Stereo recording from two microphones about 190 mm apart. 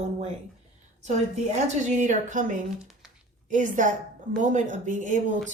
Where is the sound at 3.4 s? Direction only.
40° right (ahead or behind).